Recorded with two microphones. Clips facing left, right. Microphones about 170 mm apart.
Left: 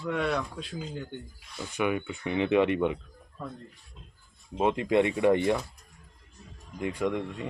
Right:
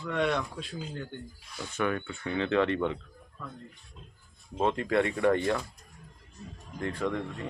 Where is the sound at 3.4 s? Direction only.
35° left (ahead or behind).